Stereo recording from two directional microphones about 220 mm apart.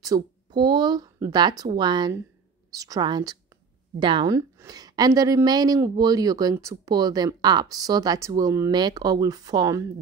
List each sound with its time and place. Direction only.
0.0 s a woman's voice: 20° right (ahead or behind)